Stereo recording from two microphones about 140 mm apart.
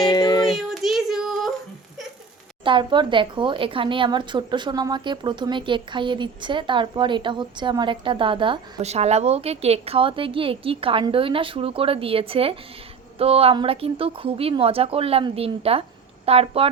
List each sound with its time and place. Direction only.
0.0 s child singing: 30° left (ahead or behind)
0.4 s child singing: centre (ahead or behind)
2.6 s speech: 35° right (ahead or behind)
8.8 s a woman's voice: 50° right (ahead or behind)